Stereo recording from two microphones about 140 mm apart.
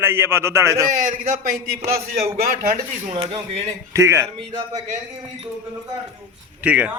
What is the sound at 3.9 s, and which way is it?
Speech, 20° right (ahead or behind).